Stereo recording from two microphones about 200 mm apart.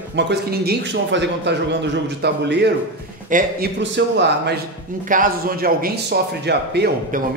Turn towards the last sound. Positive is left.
turn(degrees=-55)  # may be behind; listen again after turning